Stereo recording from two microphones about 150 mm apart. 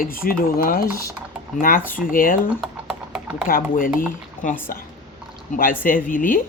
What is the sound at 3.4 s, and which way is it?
Speech, 70° left (ahead or behind).